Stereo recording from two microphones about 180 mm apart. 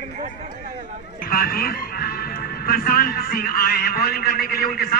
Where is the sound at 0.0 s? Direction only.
45° right (ahead or behind).